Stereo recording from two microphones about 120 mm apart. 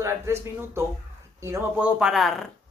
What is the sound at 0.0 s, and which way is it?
Speech, 20° right (ahead or behind).